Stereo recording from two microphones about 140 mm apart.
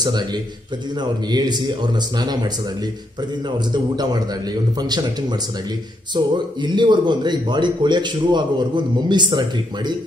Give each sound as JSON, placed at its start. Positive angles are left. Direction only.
{"t": 0.0, "sound": "a man's voice", "side_deg": -30}
{"t": 3.5, "sound": "a man's voice", "side_deg": -30}
{"t": 6.1, "sound": "a man's voice", "side_deg": -30}